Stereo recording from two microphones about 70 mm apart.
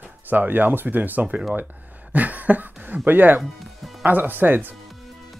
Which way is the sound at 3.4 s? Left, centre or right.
Centre.